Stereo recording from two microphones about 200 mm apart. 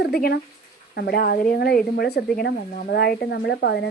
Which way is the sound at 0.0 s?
50° left (ahead or behind).